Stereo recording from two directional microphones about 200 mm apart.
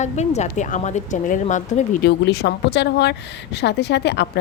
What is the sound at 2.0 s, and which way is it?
A woman's voice, 55° left (ahead or behind).